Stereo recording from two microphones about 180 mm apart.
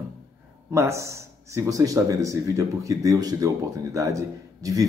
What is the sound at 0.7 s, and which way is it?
A man's voice, 15° right (ahead or behind).